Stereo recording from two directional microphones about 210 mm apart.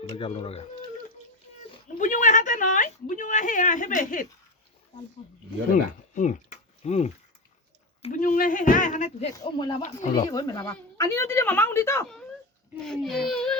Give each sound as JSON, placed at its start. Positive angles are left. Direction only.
{"t": 0.2, "sound": "speech", "side_deg": 25}
{"t": 2.0, "sound": "a woman's voice", "side_deg": 35}
{"t": 5.7, "sound": "speech", "side_deg": 35}
{"t": 9.3, "sound": "a woman's voice", "side_deg": 20}
{"t": 12.8, "sound": "speech", "side_deg": 0}